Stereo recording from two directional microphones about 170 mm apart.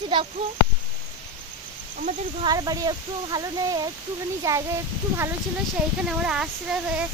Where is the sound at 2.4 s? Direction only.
20° right (ahead or behind).